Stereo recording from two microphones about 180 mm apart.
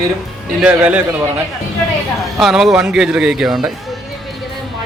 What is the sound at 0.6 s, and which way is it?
Speech, 5° right (ahead or behind).